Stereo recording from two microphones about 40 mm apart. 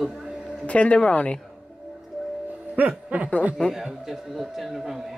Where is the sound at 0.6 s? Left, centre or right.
Left.